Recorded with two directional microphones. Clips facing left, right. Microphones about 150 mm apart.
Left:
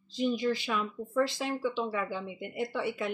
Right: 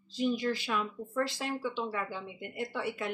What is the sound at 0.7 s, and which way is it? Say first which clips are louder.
Speech: left 1 dB; 5° left (ahead or behind).